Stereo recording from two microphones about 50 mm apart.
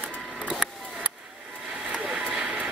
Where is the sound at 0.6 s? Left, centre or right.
Centre.